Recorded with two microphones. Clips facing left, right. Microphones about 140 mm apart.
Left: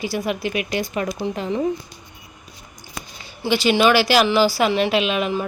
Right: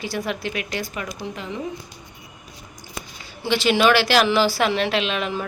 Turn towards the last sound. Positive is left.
turn(degrees=10)  # may be behind; listen again after turning